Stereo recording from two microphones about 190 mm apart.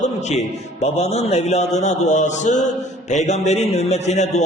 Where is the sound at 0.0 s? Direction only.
35° left (ahead or behind).